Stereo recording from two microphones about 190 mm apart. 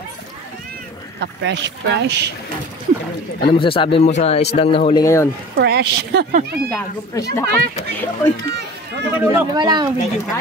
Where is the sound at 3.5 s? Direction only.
25° left (ahead or behind).